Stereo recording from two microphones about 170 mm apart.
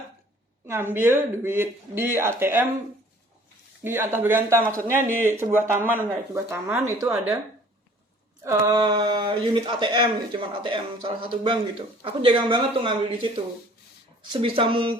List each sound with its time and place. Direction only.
0.7 s speech: 15° right (ahead or behind)
3.8 s speech: 15° right (ahead or behind)
8.4 s speech: 20° right (ahead or behind)